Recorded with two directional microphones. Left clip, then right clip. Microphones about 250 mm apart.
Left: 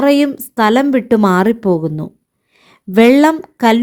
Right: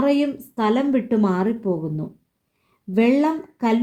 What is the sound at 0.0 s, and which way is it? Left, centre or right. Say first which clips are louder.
A woman's voice: left 8 dB; left.